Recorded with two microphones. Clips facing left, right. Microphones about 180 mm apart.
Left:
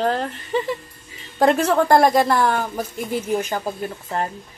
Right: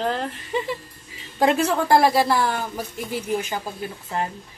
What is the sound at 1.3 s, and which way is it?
Speech, 50° left (ahead or behind).